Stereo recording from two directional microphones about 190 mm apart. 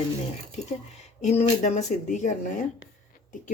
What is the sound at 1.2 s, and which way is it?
A woman's voice, 35° left (ahead or behind).